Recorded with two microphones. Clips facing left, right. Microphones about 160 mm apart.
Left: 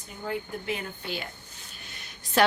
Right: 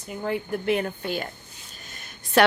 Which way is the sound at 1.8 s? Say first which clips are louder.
Right 3 dB; 45° right (ahead or behind).